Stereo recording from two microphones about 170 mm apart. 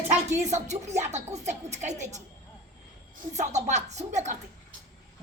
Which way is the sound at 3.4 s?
45° right (ahead or behind).